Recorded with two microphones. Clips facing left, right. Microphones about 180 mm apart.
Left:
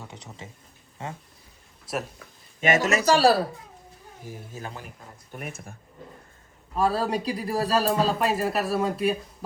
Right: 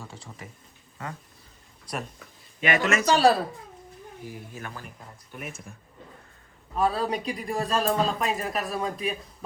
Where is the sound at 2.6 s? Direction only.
45° left (ahead or behind).